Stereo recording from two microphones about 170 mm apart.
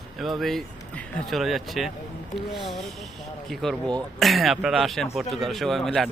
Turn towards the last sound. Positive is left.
turn(degrees=0)  # may be behind; listen again after turning